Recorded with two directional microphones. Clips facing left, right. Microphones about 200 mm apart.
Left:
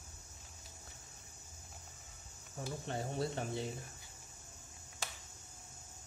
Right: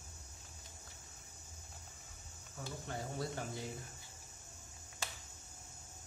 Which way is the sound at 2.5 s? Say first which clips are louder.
Left 4 dB; 25° left (ahead or behind).